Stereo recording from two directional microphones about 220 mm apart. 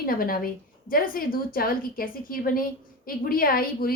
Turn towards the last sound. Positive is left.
turn(degrees=40)  # may be behind; listen again after turning